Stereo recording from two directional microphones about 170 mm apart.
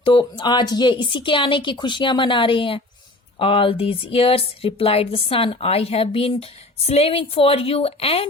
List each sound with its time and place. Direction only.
0.0 s a woman's voice: 30° left (ahead or behind)